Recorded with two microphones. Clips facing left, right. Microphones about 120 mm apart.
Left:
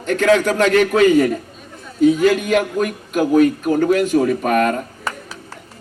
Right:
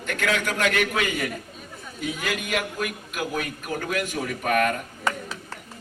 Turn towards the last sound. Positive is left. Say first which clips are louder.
# left 5 dB
turn(degrees=35)  # may be behind; listen again after turning